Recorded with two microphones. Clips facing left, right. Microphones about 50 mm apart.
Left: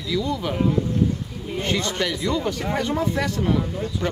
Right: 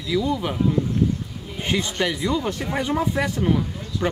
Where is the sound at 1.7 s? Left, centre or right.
Centre.